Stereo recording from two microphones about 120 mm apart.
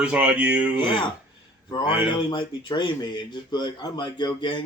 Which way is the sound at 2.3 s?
40° left (ahead or behind).